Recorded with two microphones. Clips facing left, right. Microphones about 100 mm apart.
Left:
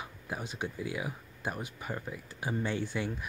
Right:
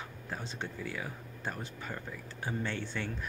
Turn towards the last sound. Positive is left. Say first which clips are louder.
# left 4 dB
turn(degrees=10)  # may be behind; listen again after turning